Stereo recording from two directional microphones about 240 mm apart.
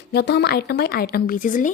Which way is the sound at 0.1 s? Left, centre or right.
Left.